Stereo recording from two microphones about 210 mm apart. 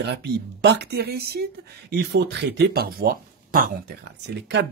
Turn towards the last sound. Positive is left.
turn(degrees=-55)  # may be behind; listen again after turning